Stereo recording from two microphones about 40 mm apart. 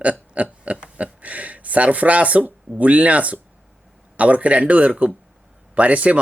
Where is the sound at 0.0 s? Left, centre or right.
Right.